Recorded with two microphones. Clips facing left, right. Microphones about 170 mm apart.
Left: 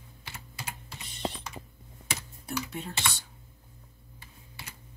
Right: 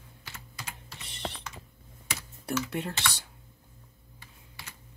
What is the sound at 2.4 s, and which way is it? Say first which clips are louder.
Speech: right 6 dB; 65° right (ahead or behind).